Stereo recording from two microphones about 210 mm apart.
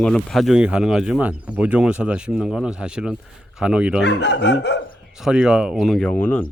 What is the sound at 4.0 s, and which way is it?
Speech, 55° left (ahead or behind).